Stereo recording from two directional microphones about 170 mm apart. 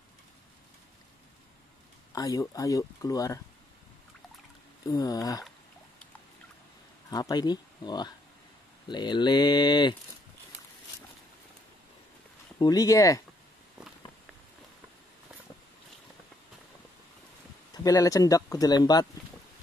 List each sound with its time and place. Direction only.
2.1 s speech: 20° left (ahead or behind)
4.8 s speech: 20° left (ahead or behind)
7.1 s speech: 25° left (ahead or behind)
12.5 s speech: 20° left (ahead or behind)
17.8 s speech: 20° left (ahead or behind)